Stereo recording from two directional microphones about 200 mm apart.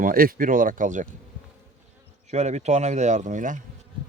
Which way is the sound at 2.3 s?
35° right (ahead or behind).